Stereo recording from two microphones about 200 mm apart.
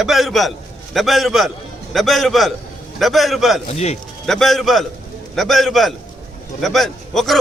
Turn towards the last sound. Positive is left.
turn(degrees=0)  # may be behind; listen again after turning